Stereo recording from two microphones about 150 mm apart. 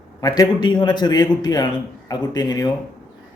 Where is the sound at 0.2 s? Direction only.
25° left (ahead or behind).